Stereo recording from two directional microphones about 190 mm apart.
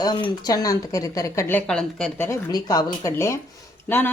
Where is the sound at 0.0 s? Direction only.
20° left (ahead or behind).